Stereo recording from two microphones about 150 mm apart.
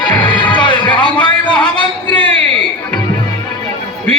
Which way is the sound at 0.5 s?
30° left (ahead or behind).